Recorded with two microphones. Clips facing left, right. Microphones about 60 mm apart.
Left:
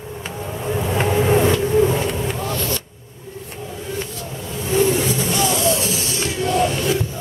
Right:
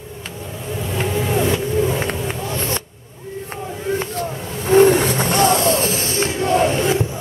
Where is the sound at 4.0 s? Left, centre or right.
Right.